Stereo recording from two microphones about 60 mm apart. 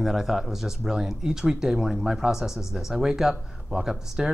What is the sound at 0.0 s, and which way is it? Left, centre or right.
Speech, centre.